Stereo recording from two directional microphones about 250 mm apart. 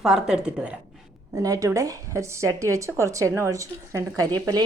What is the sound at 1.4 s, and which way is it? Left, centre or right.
A woman's voice, centre.